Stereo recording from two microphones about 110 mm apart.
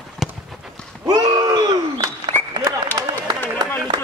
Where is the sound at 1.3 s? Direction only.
35° right (ahead or behind).